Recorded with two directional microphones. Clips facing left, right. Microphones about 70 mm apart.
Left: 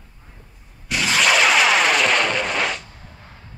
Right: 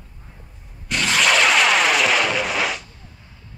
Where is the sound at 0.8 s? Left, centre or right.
Centre.